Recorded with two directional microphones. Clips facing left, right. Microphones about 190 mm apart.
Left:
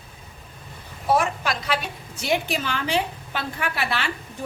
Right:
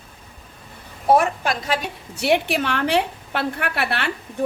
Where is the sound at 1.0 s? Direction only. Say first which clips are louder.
Right 4 dB; 45° right (ahead or behind).